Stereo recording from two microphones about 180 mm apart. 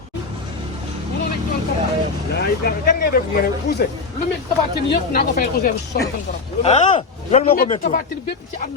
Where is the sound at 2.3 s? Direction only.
60° left (ahead or behind).